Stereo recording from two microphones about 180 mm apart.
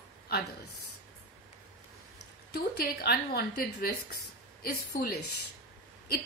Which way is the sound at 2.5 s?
60° left (ahead or behind).